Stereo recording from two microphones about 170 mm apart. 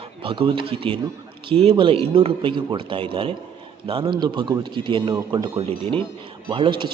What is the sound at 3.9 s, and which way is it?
A man's voice, 25° right (ahead or behind).